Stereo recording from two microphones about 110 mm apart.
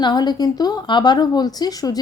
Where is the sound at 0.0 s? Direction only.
40° left (ahead or behind).